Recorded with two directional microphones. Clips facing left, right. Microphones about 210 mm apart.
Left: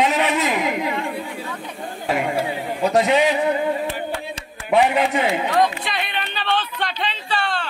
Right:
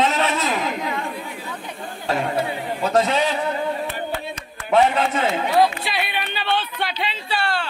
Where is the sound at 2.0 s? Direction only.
10° left (ahead or behind).